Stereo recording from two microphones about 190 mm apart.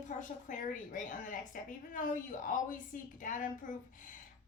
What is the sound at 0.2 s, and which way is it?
A woman's voice, 45° left (ahead or behind).